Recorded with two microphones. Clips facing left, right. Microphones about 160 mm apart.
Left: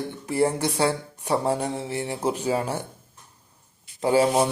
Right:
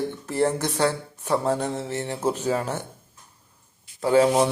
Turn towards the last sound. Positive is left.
turn(degrees=10)  # may be behind; listen again after turning